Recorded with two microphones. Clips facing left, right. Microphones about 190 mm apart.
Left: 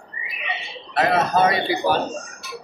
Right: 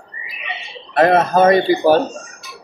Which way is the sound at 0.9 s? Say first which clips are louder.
Right 6 dB; 50° right (ahead or behind).